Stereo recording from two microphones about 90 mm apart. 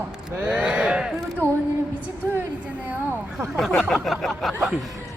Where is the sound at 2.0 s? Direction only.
25° right (ahead or behind).